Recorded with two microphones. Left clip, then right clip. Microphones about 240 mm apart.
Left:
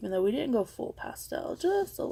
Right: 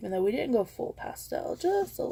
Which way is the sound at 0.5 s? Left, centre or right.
Left.